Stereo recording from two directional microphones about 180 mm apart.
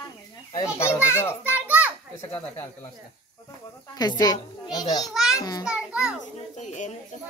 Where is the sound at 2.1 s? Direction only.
15° left (ahead or behind).